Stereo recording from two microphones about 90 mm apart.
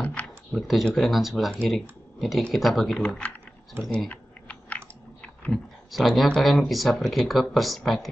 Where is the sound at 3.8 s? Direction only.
25° right (ahead or behind).